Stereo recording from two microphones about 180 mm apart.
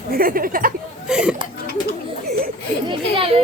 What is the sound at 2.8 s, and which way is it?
Speech, 30° right (ahead or behind).